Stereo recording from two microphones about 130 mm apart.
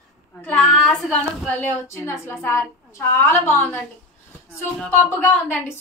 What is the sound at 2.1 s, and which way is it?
A woman's voice, 15° left (ahead or behind).